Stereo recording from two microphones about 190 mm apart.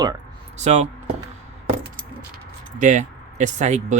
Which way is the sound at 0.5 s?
35° right (ahead or behind).